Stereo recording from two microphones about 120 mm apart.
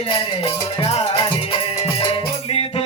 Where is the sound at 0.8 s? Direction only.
60° left (ahead or behind).